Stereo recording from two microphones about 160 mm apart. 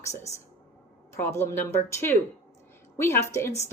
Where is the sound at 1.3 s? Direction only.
15° left (ahead or behind).